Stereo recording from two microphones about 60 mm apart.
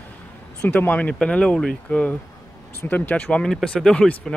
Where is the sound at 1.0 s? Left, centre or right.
Centre.